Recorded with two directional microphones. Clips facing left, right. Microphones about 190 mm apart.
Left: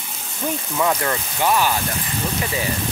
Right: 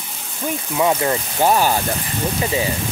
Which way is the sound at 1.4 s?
40° right (ahead or behind).